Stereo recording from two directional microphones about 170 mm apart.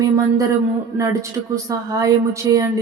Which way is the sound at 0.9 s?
20° right (ahead or behind).